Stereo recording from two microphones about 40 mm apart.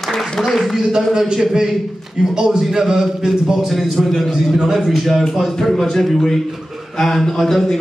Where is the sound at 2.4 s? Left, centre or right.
Centre.